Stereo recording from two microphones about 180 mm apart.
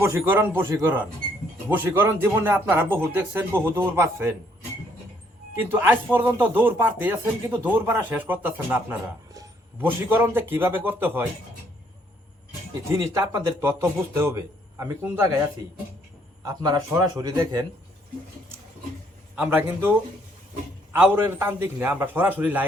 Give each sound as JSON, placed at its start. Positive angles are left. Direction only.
{"t": 0.0, "sound": "speech", "side_deg": -15}
{"t": 5.6, "sound": "speech", "side_deg": -10}
{"t": 12.9, "sound": "speech", "side_deg": -15}
{"t": 16.4, "sound": "speech", "side_deg": -25}
{"t": 19.4, "sound": "speech", "side_deg": -10}
{"t": 20.9, "sound": "speech", "side_deg": -15}